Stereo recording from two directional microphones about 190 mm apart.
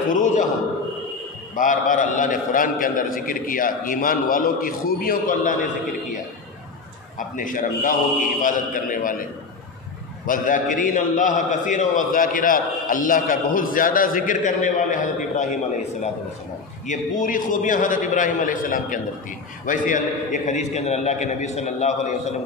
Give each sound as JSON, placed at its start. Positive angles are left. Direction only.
{"t": 0.1, "sound": "a man's voice", "side_deg": 40}
{"t": 1.5, "sound": "a man's voice", "side_deg": 45}
{"t": 7.2, "sound": "a man's voice", "side_deg": 45}
{"t": 10.2, "sound": "a man's voice", "side_deg": 45}